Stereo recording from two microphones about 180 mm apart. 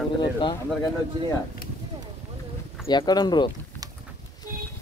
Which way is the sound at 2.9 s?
25° left (ahead or behind).